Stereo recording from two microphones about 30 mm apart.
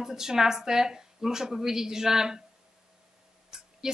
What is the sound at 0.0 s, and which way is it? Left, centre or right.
A woman's voice, centre.